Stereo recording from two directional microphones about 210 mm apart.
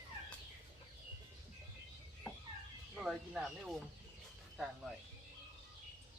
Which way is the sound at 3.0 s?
Centre (ahead or behind).